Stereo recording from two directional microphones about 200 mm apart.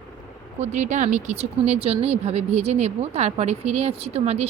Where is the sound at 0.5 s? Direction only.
35° right (ahead or behind).